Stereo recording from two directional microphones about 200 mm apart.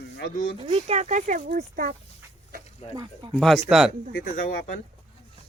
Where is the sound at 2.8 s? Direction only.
30° left (ahead or behind).